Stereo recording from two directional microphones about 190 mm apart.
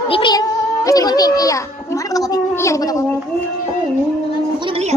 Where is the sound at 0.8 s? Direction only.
20° left (ahead or behind).